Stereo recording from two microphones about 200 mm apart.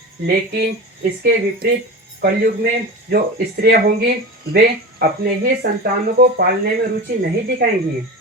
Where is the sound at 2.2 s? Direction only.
55° right (ahead or behind).